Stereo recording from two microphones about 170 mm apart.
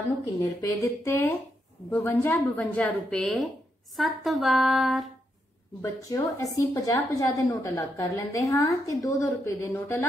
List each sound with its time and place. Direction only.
0.6 s a woman's voice: 15° left (ahead or behind); by 5.0 s centre (ahead or behind)
5.8 s a woman's voice: 20° left (ahead or behind)